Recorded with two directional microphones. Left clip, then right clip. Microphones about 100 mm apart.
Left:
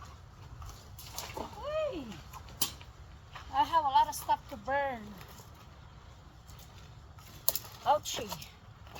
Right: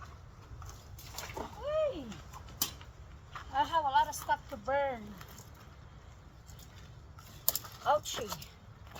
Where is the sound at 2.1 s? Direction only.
35° left (ahead or behind).